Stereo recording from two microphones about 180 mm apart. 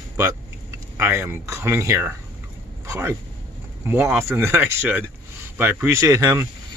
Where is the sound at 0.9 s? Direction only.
15° right (ahead or behind).